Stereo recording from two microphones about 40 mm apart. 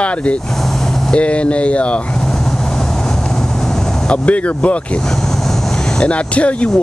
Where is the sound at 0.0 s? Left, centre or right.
Left.